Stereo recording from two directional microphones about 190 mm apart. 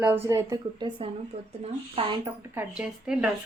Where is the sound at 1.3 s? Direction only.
35° right (ahead or behind).